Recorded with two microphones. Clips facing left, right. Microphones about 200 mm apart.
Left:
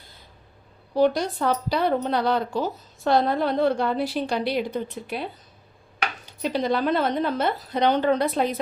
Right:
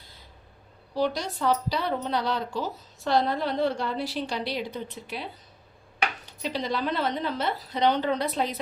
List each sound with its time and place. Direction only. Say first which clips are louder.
0.9 s speech: left 7 dB; 55° left (ahead or behind)
6.4 s speech: left 6 dB; 55° left (ahead or behind)